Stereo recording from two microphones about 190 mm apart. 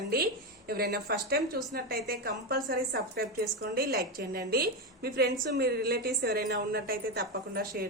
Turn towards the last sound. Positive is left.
turn(degrees=-50)  # may be behind; listen again after turning